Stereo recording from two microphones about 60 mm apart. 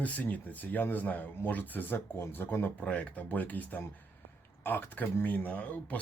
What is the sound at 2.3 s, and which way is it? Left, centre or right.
Speech, left.